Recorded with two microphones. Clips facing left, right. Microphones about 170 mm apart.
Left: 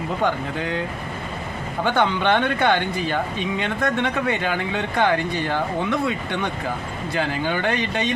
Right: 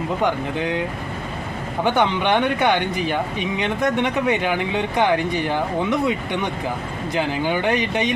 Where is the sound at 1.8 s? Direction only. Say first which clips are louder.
Right 1 dB; 15° right (ahead or behind).